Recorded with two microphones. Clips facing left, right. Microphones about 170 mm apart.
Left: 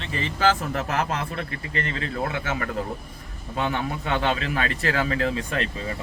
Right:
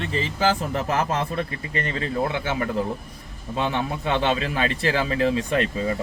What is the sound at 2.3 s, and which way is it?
Speech, 30° right (ahead or behind).